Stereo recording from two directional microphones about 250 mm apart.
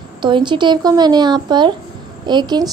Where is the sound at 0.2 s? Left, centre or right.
Centre.